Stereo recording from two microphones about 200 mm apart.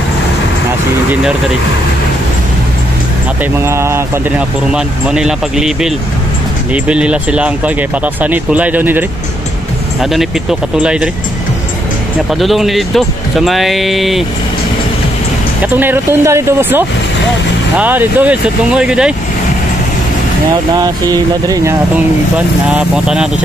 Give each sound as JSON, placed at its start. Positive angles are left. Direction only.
{"t": 3.6, "sound": "speech", "side_deg": -15}
{"t": 10.1, "sound": "speech", "side_deg": -5}
{"t": 12.4, "sound": "speech", "side_deg": 0}
{"t": 15.6, "sound": "speech", "side_deg": -10}
{"t": 20.7, "sound": "speech", "side_deg": -20}
{"t": 22.7, "sound": "speech", "side_deg": -5}